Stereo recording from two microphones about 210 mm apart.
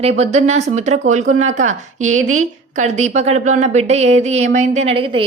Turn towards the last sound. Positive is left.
turn(degrees=-25)  # may be behind; listen again after turning